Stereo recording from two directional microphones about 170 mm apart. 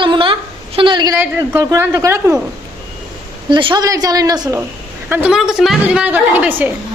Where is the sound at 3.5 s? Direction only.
30° right (ahead or behind).